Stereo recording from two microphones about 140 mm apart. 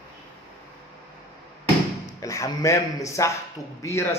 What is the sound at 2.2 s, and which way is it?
Speech, 25° left (ahead or behind).